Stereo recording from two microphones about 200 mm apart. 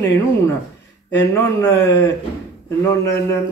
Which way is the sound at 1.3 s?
15° left (ahead or behind).